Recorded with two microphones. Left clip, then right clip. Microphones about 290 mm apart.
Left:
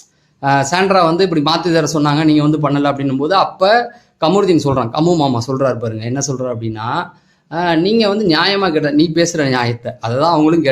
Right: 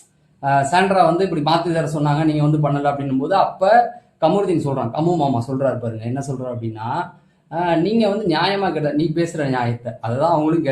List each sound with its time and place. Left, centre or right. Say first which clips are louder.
0.4 s speech: left 3 dB; left